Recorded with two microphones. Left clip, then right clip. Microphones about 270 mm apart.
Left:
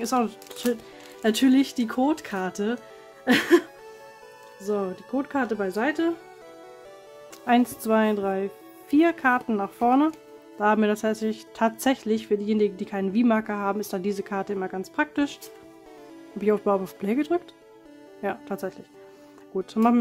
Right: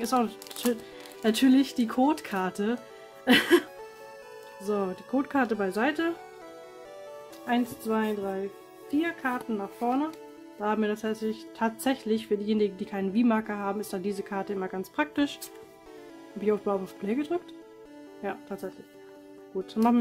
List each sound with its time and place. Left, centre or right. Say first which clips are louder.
0.0 s speech: left 2 dB; centre
4.6 s speech: left 2 dB; centre
7.4 s speech: left 7 dB; left
16.3 s speech: left 5 dB; centre